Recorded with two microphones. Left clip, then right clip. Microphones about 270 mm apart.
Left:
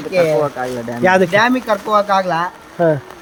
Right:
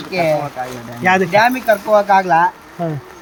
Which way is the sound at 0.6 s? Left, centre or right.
Centre.